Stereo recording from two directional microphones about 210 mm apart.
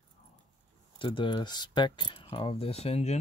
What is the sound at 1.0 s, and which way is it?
Speech, 25° left (ahead or behind).